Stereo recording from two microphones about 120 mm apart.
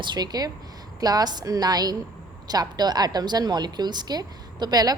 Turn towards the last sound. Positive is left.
turn(degrees=-30)  # may be behind; listen again after turning